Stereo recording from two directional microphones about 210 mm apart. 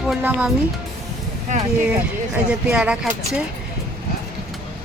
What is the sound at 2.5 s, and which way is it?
Speech, 5° right (ahead or behind).